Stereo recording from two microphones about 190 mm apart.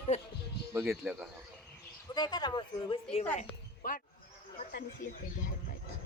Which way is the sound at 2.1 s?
20° left (ahead or behind).